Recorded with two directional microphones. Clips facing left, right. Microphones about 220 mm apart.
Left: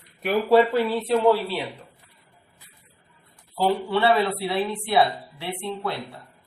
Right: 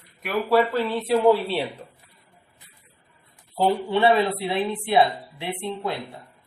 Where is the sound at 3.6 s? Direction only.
20° right (ahead or behind).